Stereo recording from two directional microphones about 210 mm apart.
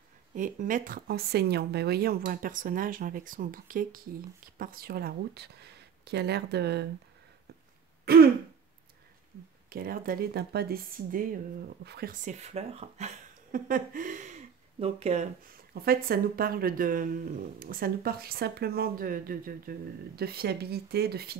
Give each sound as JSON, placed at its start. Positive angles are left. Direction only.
{"t": 0.3, "sound": "speech", "side_deg": -40}
{"t": 8.0, "sound": "throat clearing", "side_deg": -45}
{"t": 9.7, "sound": "speech", "side_deg": -45}
{"t": 15.7, "sound": "speech", "side_deg": -45}